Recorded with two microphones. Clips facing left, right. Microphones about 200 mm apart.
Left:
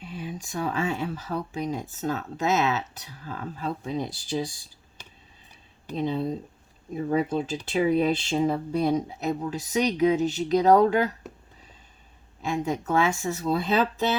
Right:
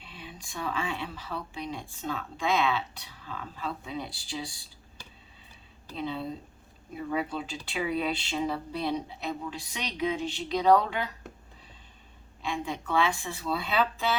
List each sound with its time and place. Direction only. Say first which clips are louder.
0.0 s speech: left 10 dB; 45° left (ahead or behind)
6.9 s speech: left 7 dB; 45° left (ahead or behind)
12.5 s speech: left 6 dB; 40° left (ahead or behind)